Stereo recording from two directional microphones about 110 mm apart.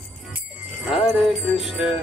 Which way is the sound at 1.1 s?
Centre (ahead or behind).